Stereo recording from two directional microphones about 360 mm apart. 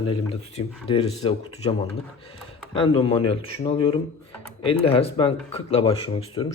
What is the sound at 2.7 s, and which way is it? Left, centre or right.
Speech, centre.